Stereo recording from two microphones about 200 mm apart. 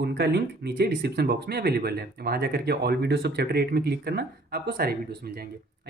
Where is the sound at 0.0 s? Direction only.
55° right (ahead or behind).